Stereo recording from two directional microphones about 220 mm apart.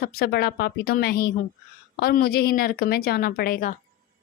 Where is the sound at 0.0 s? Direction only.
45° left (ahead or behind).